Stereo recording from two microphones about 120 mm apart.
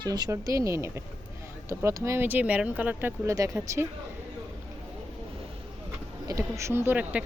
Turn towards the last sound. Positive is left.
turn(degrees=-15)  # may be behind; listen again after turning